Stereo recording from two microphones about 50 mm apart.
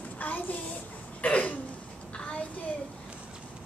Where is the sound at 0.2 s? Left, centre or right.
Left.